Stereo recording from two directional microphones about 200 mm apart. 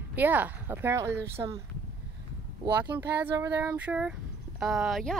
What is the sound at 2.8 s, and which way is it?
A woman's voice, 10° right (ahead or behind).